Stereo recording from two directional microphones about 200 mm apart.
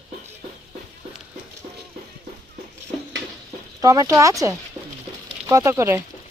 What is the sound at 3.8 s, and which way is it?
Speech, 15° right (ahead or behind).